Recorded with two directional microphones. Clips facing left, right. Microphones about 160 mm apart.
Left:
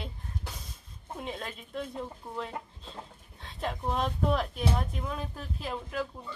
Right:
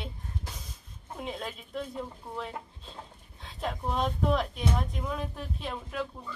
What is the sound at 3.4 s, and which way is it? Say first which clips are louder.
Speech: even; centre (ahead or behind).